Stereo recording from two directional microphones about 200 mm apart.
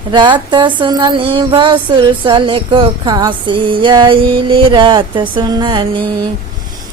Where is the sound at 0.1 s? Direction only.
25° right (ahead or behind).